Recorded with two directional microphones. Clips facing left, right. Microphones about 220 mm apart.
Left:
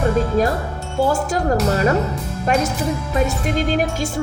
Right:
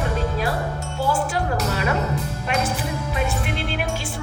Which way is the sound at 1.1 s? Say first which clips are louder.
Left 2 dB; 40° left (ahead or behind).